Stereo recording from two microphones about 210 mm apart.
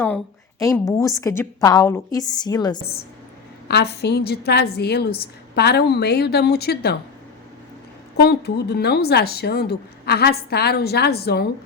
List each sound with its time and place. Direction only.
0.9 s a woman's voice: 15° left (ahead or behind)
3.7 s a woman's voice: 50° left (ahead or behind)
8.1 s a woman's voice: 50° left (ahead or behind)